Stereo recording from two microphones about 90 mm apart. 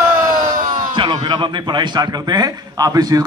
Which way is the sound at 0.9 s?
60° right (ahead or behind).